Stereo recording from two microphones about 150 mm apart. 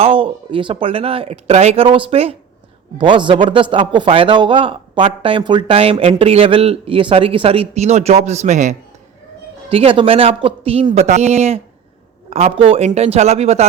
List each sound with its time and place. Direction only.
0.0 s a man's voice: 35° right (ahead or behind)
9.6 s a man's voice: 40° right (ahead or behind)